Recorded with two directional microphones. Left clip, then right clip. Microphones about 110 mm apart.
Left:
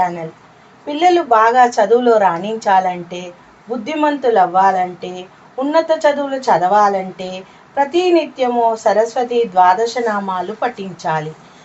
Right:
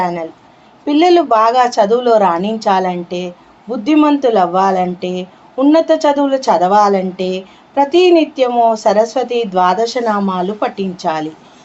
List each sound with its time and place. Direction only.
0.0 s a woman's voice: 15° right (ahead or behind)